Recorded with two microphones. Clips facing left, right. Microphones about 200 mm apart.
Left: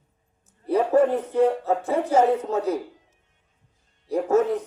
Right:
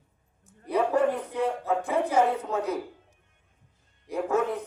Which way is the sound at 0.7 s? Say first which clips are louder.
Left 5 dB; 45° left (ahead or behind).